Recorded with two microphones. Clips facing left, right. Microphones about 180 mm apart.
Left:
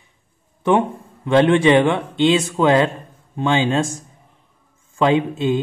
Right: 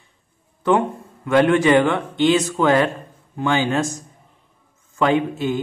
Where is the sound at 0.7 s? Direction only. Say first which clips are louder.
Left 1 dB; 25° left (ahead or behind).